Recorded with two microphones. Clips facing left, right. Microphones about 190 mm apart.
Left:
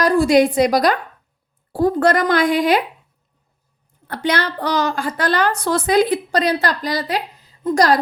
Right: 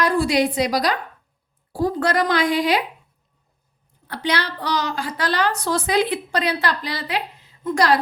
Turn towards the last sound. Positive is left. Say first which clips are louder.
# left 3 dB
turn(degrees=40)  # may be behind; listen again after turning